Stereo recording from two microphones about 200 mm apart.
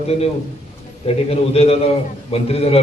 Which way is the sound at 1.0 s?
30° left (ahead or behind).